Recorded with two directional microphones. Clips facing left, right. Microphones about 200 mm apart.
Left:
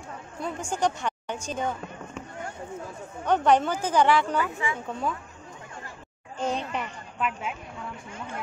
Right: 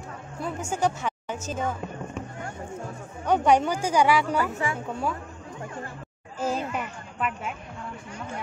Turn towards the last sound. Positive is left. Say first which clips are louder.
# even
turn(degrees=0)  # may be behind; listen again after turning